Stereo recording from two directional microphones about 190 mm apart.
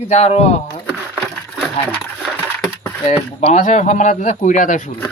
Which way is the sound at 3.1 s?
40° left (ahead or behind).